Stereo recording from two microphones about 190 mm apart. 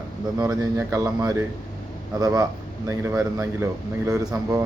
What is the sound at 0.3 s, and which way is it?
Speech, 15° right (ahead or behind).